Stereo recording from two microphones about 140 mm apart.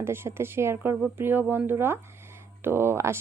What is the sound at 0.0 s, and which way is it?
Speech, 15° right (ahead or behind).